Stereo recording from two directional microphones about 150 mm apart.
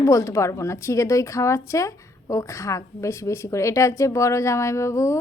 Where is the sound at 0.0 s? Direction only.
20° left (ahead or behind).